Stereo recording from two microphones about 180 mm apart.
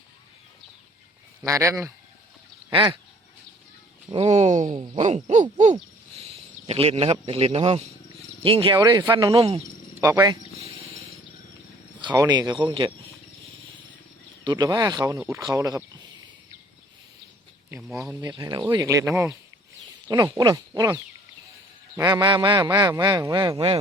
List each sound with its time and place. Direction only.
1.5 s speech: 15° right (ahead or behind)
2.7 s a man's voice: 25° right (ahead or behind)
4.1 s a man's voice: 35° right (ahead or behind)
10.0 s speech: 20° right (ahead or behind)
11.9 s a man's voice: 25° right (ahead or behind)
14.4 s a man's voice: 25° right (ahead or behind)
17.7 s speech: 5° right (ahead or behind)
17.9 s a man's voice: 15° right (ahead or behind)